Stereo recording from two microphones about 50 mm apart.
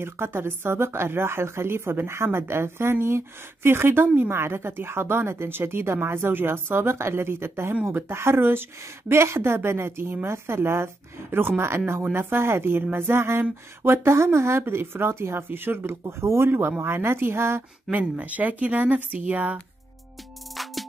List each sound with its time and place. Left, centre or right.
0.0 s speech: right
9.1 s speech: right
11.2 s speech: right
14.1 s speech: right
14.6 s speech: right
16.0 s speech: right
16.4 s speech: right
17.9 s speech: right
20.6 s music: centre